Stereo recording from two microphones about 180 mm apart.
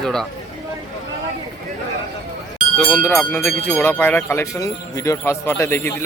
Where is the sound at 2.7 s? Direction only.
10° left (ahead or behind).